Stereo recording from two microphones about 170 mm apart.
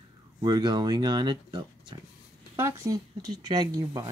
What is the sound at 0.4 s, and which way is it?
Speech, 25° right (ahead or behind).